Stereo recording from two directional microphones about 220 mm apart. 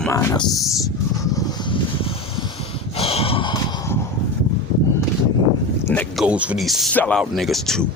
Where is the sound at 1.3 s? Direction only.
20° left (ahead or behind).